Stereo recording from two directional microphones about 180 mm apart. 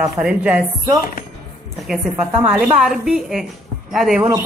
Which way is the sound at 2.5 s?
Centre (ahead or behind).